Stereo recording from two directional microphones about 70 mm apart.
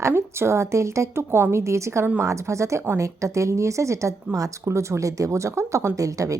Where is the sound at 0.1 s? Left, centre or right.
Right.